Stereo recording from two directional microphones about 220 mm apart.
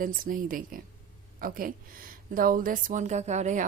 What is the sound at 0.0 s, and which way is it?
A woman's voice, 40° right (ahead or behind).